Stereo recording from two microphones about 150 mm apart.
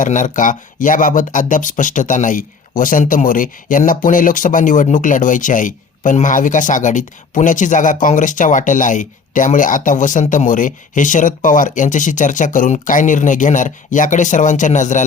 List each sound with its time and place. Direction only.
0.0 s speech: 60° left (ahead or behind)